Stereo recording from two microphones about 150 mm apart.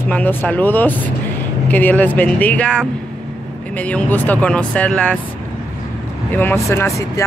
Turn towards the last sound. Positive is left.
turn(degrees=20)  # may be behind; listen again after turning